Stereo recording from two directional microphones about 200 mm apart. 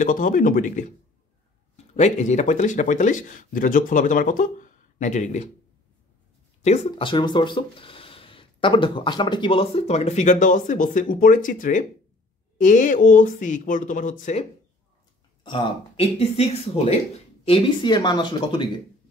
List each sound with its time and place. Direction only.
0.0 s speech: 40° left (ahead or behind)
2.0 s speech: 35° left (ahead or behind)
6.6 s speech: 30° left (ahead or behind)
15.4 s speech: 25° left (ahead or behind)